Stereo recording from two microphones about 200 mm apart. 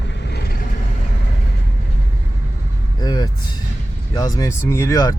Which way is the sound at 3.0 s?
20° left (ahead or behind).